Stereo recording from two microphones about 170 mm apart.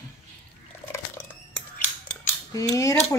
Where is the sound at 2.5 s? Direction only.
20° left (ahead or behind).